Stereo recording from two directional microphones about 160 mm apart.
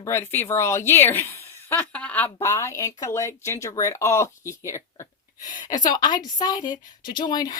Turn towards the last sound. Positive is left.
turn(degrees=25)  # may be behind; listen again after turning